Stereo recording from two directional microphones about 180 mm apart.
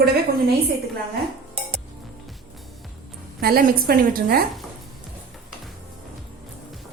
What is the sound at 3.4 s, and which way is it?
A woman's voice, 55° right (ahead or behind).